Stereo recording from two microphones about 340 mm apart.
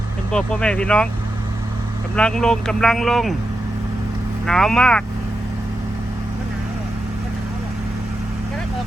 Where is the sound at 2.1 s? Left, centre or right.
Centre.